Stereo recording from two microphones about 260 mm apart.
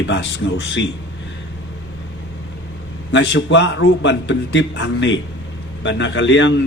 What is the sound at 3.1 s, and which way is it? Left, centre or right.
Speech, left.